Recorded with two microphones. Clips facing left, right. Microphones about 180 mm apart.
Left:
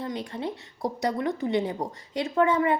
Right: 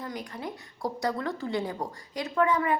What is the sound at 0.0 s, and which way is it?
Speech, 25° left (ahead or behind).